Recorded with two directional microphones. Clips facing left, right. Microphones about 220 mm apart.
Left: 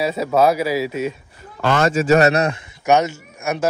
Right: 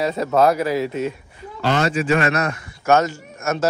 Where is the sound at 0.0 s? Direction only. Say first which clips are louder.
Left 1 dB; 10° left (ahead or behind).